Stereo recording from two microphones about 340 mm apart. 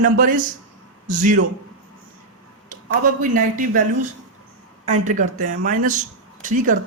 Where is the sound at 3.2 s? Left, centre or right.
Right.